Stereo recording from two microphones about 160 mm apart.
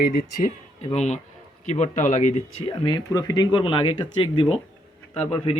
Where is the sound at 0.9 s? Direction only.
45° left (ahead or behind).